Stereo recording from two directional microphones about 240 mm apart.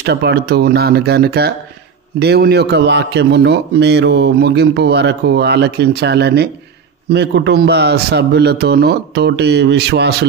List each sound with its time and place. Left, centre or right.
0.0 s a man's voice: right